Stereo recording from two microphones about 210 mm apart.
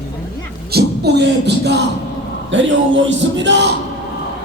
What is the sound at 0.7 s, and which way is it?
Music, 50° right (ahead or behind).